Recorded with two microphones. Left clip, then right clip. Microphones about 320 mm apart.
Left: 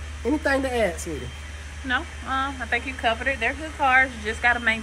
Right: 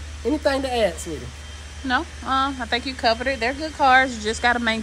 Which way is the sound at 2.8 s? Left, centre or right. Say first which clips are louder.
Right 5 dB; centre.